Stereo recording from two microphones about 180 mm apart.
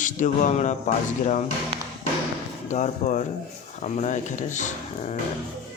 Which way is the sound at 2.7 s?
40° left (ahead or behind).